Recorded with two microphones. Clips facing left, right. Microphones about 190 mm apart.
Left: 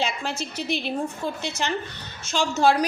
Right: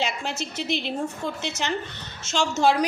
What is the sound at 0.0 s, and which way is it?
Speech, 20° right (ahead or behind).